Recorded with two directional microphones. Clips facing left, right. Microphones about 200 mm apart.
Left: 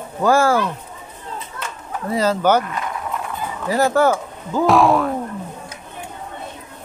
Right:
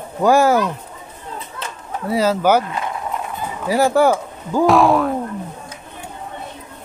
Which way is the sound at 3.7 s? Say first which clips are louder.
Right 2 dB; 10° right (ahead or behind).